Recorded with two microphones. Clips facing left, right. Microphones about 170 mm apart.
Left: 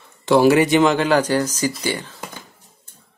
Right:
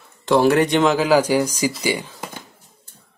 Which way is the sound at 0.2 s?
5° left (ahead or behind).